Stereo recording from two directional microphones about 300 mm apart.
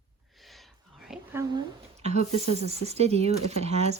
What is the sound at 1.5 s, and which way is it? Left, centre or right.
Speech, centre.